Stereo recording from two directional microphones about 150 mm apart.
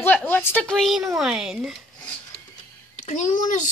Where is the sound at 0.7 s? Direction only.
Centre (ahead or behind).